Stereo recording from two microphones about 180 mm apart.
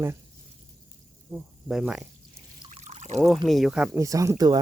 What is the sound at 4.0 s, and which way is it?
Speech, 20° right (ahead or behind).